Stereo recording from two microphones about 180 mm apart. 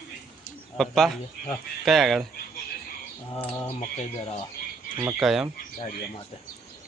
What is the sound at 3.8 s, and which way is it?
Speech, 35° left (ahead or behind).